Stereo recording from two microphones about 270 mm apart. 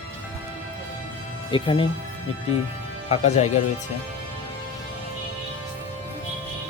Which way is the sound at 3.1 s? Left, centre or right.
Left.